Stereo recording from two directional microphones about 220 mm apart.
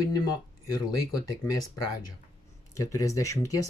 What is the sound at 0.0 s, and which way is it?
Speech, 15° left (ahead or behind).